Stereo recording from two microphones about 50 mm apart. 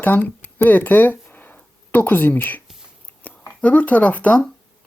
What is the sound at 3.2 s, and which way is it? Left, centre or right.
Speech, left.